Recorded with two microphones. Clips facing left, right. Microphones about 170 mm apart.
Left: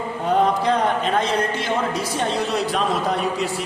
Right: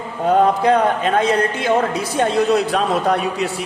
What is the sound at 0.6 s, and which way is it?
A woman's voice, 55° right (ahead or behind).